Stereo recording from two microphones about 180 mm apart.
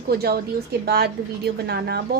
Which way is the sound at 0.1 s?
60° right (ahead or behind).